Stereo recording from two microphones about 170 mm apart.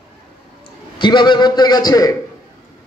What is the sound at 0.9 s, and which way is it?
A man's voice, 25° left (ahead or behind).